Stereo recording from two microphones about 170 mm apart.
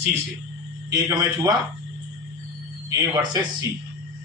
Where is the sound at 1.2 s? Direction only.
20° right (ahead or behind).